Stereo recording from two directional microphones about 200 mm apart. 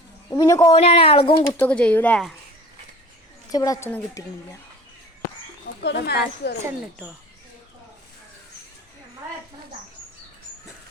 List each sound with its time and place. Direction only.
0.3 s speech: 15° left (ahead or behind)
0.8 s a woman's voice: 30° left (ahead or behind)
1.5 s speech: 5° left (ahead or behind)
3.5 s speech: 15° left (ahead or behind)
5.8 s speech: 55° left (ahead or behind)